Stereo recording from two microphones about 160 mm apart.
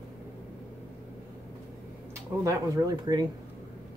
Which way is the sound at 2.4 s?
20° right (ahead or behind).